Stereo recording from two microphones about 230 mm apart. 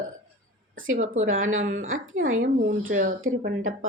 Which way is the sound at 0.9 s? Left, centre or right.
Right.